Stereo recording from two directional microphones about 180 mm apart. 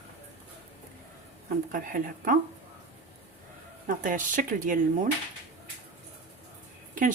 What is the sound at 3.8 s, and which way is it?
Speech, 50° right (ahead or behind).